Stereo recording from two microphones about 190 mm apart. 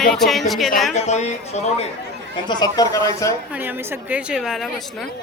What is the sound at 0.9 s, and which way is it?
Speech, 35° left (ahead or behind).